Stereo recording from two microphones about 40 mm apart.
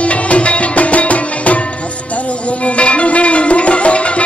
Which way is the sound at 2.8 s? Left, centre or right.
Left.